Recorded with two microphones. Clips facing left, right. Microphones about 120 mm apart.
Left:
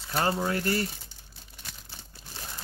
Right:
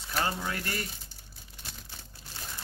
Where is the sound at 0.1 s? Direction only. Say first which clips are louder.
Left 5 dB; 30° left (ahead or behind).